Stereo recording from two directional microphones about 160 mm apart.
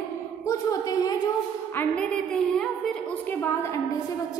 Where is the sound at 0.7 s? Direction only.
20° left (ahead or behind).